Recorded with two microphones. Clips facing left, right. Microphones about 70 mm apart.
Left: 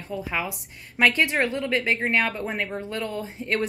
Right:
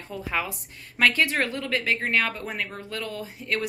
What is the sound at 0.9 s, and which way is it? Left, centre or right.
Speech, centre.